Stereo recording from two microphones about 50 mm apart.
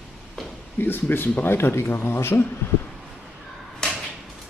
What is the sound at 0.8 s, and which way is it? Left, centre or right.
Speech, left.